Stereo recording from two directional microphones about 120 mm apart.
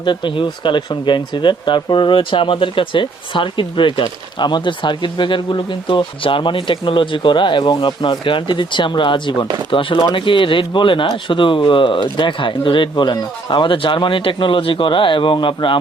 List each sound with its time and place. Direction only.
0.0 s speech: 40° left (ahead or behind)